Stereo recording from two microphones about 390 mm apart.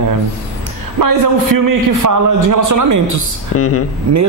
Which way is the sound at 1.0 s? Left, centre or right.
Right.